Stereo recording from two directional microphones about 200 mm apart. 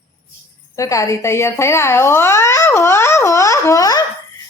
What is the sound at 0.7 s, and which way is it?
A child's voice, 15° left (ahead or behind).